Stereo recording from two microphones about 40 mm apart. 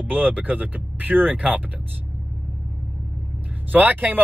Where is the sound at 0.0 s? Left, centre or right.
Right.